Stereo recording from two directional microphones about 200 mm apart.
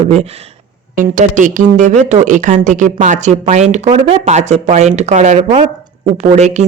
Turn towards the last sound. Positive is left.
turn(degrees=-35)  # may be behind; listen again after turning